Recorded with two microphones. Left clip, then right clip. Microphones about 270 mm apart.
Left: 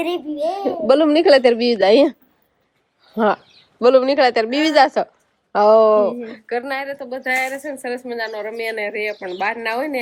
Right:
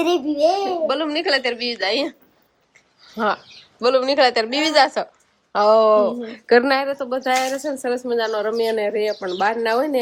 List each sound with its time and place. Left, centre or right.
0.0 s a child's voice: right
0.9 s a woman's voice: centre
6.5 s a woman's voice: right; by 10.0 s centre